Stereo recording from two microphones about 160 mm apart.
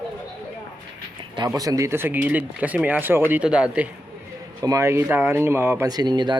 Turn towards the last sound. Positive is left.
turn(degrees=-25)  # may be behind; listen again after turning